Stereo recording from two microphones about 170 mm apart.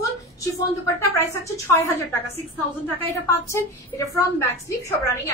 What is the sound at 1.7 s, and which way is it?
Speech, 15° left (ahead or behind).